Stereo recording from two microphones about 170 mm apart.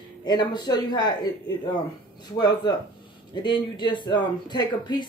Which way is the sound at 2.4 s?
25° left (ahead or behind).